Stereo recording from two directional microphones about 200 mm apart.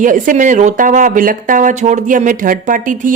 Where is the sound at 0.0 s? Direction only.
40° right (ahead or behind).